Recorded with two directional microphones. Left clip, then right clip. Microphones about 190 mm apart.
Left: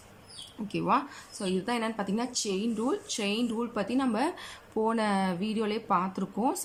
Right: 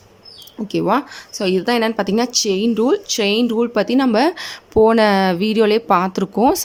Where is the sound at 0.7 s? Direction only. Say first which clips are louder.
Right 10 dB; 40° right (ahead or behind).